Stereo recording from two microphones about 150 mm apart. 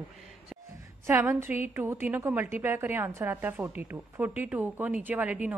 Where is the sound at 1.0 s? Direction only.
15° right (ahead or behind).